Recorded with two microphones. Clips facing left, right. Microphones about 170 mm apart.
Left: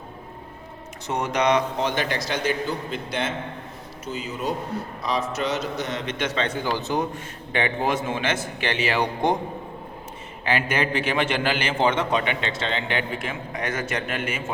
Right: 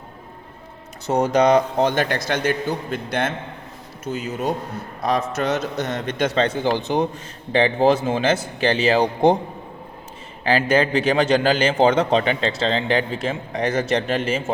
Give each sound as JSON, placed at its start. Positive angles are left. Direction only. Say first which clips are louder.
{"t": 1.0, "sound": "a man's voice", "louder": "right 6 dB", "side_deg": -35}
{"t": 1.8, "sound": "a man's voice", "louder": "right 5 dB", "side_deg": -50}
{"t": 6.7, "sound": "a man's voice", "louder": "right 4 dB", "side_deg": -15}
{"t": 7.5, "sound": "a man's voice", "louder": "right 7 dB", "side_deg": -30}
{"t": 10.4, "sound": "a man's voice", "louder": "right 6 dB", "side_deg": -35}